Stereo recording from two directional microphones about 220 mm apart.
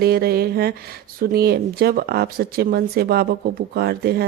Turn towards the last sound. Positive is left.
turn(degrees=-45)  # may be behind; listen again after turning